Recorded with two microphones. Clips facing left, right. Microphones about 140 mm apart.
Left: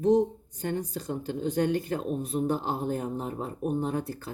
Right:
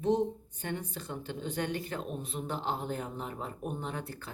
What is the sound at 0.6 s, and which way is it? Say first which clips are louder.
Speech: left 7 dB; 40° left (ahead or behind).